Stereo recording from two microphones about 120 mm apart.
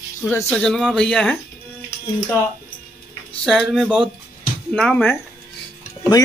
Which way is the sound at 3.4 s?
5° left (ahead or behind).